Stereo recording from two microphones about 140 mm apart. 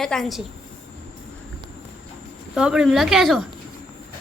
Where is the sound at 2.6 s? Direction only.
5° right (ahead or behind).